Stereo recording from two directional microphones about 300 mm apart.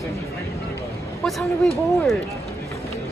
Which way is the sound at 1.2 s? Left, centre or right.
Centre.